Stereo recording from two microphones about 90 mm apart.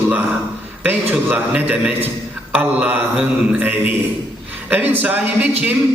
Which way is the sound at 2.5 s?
15° right (ahead or behind).